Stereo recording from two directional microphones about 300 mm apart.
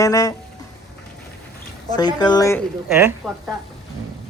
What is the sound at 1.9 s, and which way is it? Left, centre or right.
Speech, centre.